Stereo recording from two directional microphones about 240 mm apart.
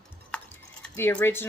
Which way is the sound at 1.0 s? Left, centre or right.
Centre.